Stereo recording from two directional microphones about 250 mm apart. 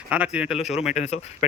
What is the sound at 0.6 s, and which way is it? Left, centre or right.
Speech, left.